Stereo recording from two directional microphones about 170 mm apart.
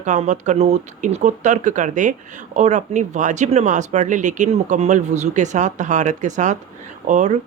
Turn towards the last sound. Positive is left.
turn(degrees=-45)  # may be behind; listen again after turning